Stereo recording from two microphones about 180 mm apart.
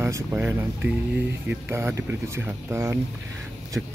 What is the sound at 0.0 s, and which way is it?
Speech, 15° right (ahead or behind).